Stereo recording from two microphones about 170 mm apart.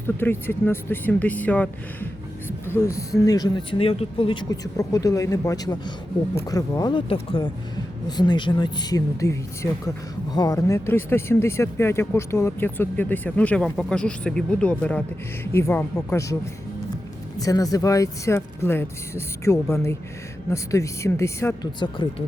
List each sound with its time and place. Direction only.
0.2 s speech: 10° left (ahead or behind)